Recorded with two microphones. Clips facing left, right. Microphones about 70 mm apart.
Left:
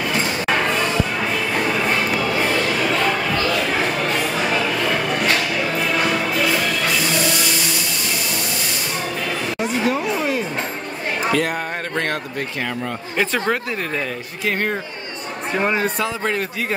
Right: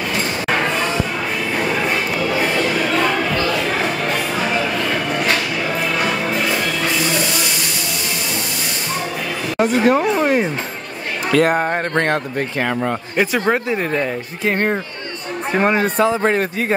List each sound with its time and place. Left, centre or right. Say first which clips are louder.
9.6 s a sound: right 8 dB; right
11.3 s a man's voice: right 6 dB; right
13.1 s speech: right 2 dB; centre
14.4 s a man's voice: right 3 dB; right